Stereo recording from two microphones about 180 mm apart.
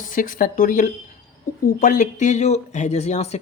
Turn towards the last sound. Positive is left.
turn(degrees=35)  # may be behind; listen again after turning